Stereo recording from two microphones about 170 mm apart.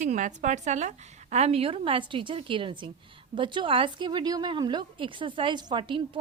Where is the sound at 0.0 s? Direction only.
45° right (ahead or behind).